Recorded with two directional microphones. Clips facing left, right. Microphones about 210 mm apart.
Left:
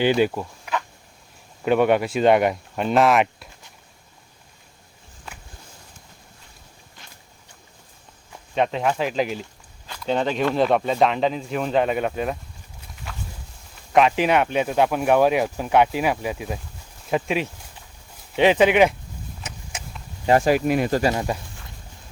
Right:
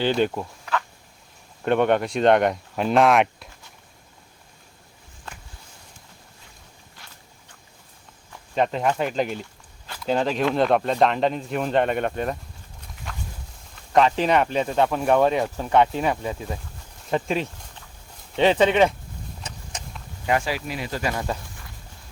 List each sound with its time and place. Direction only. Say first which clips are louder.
0.0 s speech: left 3 dB; 10° left (ahead or behind)
0.6 s insect: right 1 dB; 15° left (ahead or behind)
1.6 s speech: left 2 dB; 5° left (ahead or behind)
7.0 s a sound: left 1 dB; 20° left (ahead or behind)
8.5 s speech: even; centre (ahead or behind)
13.1 s a sound: even; 5° left (ahead or behind)
13.9 s speech: left 1 dB; 5° left (ahead or behind)
19.4 s vehicle: left 1 dB; 5° left (ahead or behind)
20.2 s speech: left 5 dB; 35° left (ahead or behind)
20.5 s speech: left 10 dB; 55° left (ahead or behind)
21.0 s speech: left 5 dB; 25° left (ahead or behind)